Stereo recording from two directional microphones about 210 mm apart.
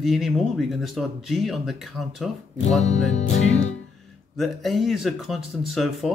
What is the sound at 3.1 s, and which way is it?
Music, 35° left (ahead or behind).